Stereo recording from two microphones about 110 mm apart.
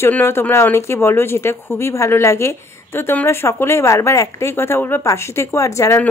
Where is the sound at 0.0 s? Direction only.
20° left (ahead or behind).